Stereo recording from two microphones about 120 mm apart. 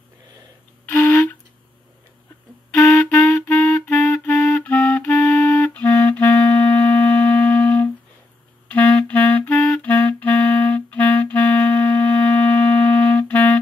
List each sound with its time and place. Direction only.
0.8 s flute: 15° left (ahead or behind)
2.7 s clarinet: 25° left (ahead or behind)
4.4 s clarinet: 5° left (ahead or behind)